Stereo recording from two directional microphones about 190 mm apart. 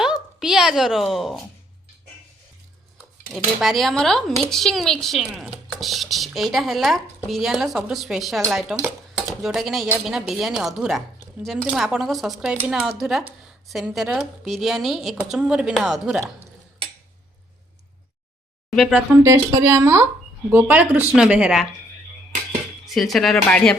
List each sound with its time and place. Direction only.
0.0 s a woman's voice: centre (ahead or behind)
3.0 s speech: centre (ahead or behind)
18.8 s speech: centre (ahead or behind)
19.2 s speech: 15° right (ahead or behind)
23.0 s speech: centre (ahead or behind)